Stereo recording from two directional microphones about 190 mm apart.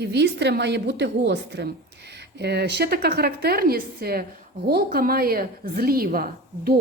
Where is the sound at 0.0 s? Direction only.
60° right (ahead or behind).